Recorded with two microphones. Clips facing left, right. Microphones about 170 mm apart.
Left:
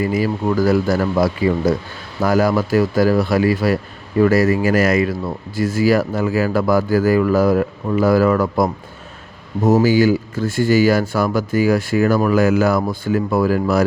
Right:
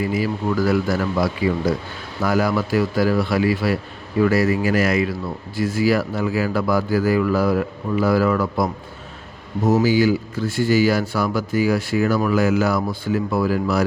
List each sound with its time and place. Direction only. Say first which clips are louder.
0.0 s a man's voice: left 3 dB; 45° left (ahead or behind)